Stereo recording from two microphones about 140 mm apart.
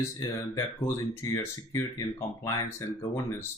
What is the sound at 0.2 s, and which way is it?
Speech, 20° left (ahead or behind).